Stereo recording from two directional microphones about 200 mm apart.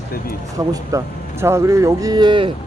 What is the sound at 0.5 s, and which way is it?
Speech, 15° right (ahead or behind).